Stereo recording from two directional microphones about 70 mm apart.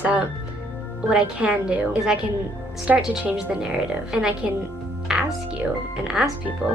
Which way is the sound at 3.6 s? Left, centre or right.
Centre.